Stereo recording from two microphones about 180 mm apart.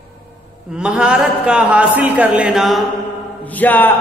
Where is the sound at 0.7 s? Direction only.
5° right (ahead or behind).